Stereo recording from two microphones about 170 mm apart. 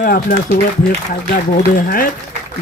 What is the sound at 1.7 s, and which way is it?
Speech, 55° left (ahead or behind).